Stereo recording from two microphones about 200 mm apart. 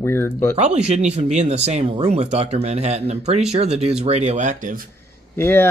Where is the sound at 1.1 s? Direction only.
35° right (ahead or behind).